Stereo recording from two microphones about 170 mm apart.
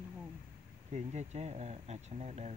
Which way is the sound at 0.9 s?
40° right (ahead or behind).